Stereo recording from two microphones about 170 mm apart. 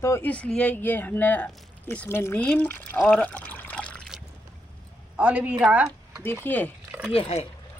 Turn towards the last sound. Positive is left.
turn(degrees=35)  # may be behind; listen again after turning